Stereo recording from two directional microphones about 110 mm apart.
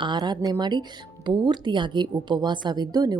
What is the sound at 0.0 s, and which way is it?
A woman's voice, 45° right (ahead or behind).